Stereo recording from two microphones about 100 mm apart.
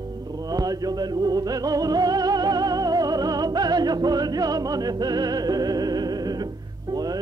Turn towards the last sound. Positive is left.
turn(degrees=-40)  # may be behind; listen again after turning